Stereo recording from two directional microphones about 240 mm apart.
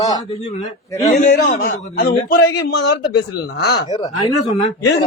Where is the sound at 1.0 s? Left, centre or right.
Left.